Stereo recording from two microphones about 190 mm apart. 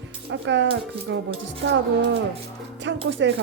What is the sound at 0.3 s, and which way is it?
Speech, 75° right (ahead or behind).